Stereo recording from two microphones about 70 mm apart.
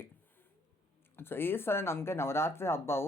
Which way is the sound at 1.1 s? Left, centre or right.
Left.